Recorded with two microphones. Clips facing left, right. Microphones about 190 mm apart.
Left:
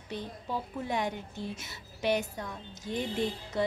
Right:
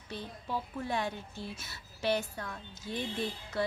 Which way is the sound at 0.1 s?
15° left (ahead or behind).